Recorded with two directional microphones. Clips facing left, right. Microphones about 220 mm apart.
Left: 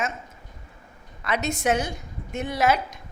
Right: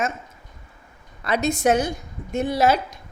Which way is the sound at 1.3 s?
35° right (ahead or behind).